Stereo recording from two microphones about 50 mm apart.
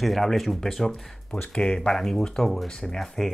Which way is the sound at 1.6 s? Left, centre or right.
Centre.